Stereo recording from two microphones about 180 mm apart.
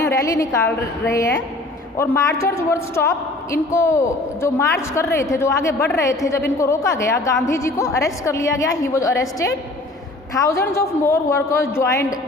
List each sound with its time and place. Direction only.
0.0 s a woman's voice: 15° left (ahead or behind)
10.3 s a woman's voice: 15° left (ahead or behind)